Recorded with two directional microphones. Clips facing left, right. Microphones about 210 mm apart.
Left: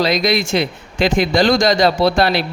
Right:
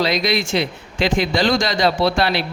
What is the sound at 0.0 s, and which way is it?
Speech, 45° left (ahead or behind).